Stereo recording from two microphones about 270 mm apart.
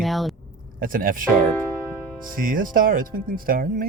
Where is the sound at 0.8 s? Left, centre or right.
Right.